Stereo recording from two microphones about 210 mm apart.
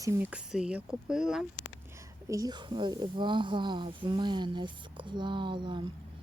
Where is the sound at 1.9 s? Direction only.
15° right (ahead or behind).